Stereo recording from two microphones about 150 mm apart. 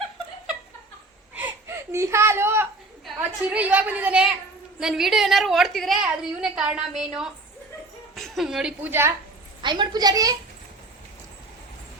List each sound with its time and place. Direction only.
1.4 s a sound: 15° right (ahead or behind)
3.2 s a woman's voice: 10° right (ahead or behind)
9.6 s a child's voice: 30° right (ahead or behind)